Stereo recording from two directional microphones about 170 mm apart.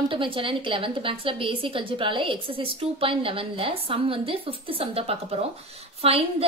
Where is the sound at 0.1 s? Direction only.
30° right (ahead or behind).